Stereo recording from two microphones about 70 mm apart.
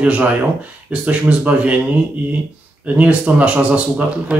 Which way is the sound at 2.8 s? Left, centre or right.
Centre.